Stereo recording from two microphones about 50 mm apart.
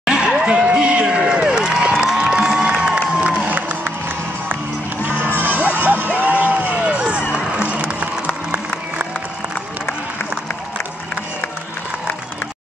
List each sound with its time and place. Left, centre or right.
0.0 s crowd: centre
0.3 s a sound: centre
3.4 s crowd: right
5.7 s music: right